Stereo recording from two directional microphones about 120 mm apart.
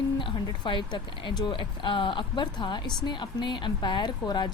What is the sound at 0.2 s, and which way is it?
Speech, 45° left (ahead or behind).